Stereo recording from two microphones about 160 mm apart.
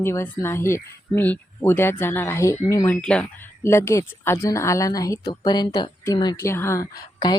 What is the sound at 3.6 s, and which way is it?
A woman's voice, 15° left (ahead or behind).